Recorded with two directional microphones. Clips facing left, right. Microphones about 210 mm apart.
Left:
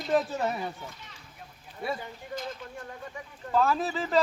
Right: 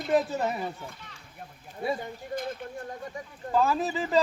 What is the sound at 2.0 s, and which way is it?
Speech, 55° right (ahead or behind).